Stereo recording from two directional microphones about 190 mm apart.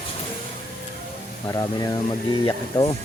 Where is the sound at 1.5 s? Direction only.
20° left (ahead or behind).